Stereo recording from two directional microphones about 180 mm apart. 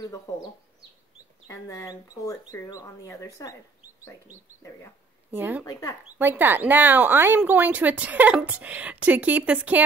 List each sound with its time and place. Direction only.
1.5 s speech: 15° left (ahead or behind)
5.3 s speech: 10° right (ahead or behind)
5.7 s speech: 20° left (ahead or behind)
6.1 s speech: 10° right (ahead or behind)